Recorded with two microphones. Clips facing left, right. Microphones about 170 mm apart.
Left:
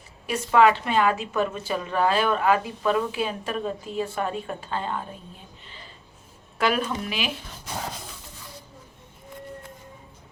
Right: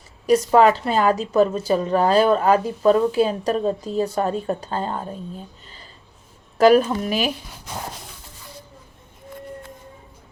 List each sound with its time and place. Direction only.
0.3 s a woman's voice: 40° right (ahead or behind)
6.6 s a woman's voice: 40° right (ahead or behind)